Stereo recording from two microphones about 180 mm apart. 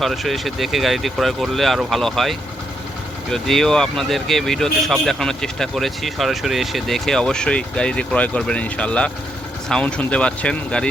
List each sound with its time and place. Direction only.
0.0 s speech: centre (ahead or behind)